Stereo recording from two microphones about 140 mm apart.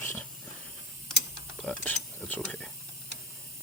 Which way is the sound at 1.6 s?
5° left (ahead or behind).